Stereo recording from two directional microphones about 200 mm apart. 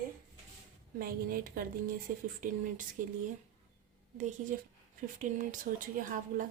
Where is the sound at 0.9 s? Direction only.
45° right (ahead or behind).